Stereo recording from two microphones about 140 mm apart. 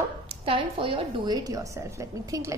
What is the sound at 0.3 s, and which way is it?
A woman's voice, 40° right (ahead or behind).